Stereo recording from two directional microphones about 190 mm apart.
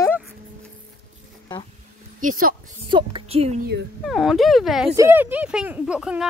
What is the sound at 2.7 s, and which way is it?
Speech, 25° right (ahead or behind).